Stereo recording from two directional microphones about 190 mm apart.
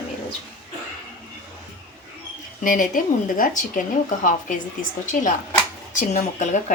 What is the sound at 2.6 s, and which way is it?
A woman's voice, 45° left (ahead or behind).